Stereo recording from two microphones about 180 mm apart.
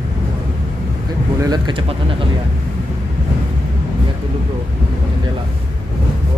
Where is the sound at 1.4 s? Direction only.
25° right (ahead or behind).